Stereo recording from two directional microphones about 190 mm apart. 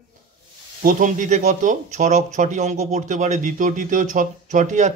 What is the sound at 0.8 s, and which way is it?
A man's voice, 45° right (ahead or behind).